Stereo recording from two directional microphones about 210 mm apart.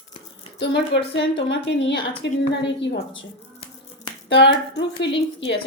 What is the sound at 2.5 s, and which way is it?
Speech, 60° left (ahead or behind).